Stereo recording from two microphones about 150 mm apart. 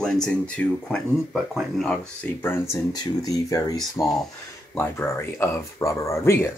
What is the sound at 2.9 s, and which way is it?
Speech, 25° left (ahead or behind).